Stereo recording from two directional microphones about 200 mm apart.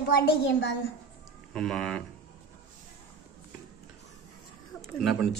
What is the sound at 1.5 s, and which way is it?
Speech, centre (ahead or behind).